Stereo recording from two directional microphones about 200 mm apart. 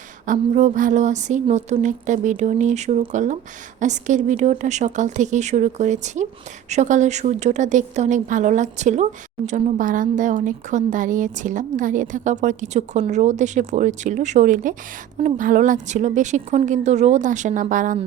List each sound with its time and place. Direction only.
0.3 s a woman's voice: 40° right (ahead or behind)